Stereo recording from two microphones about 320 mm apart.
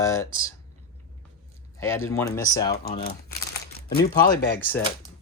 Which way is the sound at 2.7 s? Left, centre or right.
Left.